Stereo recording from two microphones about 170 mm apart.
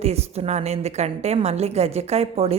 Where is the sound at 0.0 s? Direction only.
40° right (ahead or behind).